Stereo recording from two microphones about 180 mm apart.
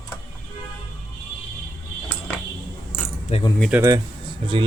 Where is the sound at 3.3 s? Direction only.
35° left (ahead or behind).